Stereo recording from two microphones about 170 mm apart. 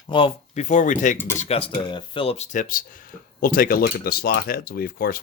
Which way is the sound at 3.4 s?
55° left (ahead or behind).